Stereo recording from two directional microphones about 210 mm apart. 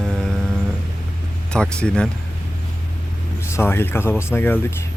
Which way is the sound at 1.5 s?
5° left (ahead or behind).